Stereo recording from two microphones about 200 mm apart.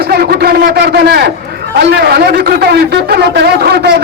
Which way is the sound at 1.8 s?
55° right (ahead or behind).